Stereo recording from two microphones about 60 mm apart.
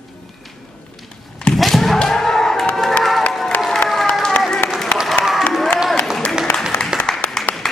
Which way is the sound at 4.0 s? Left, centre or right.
Centre.